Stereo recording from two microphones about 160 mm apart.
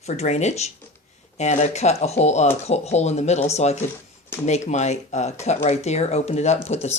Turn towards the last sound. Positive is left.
turn(degrees=45)  # may be behind; listen again after turning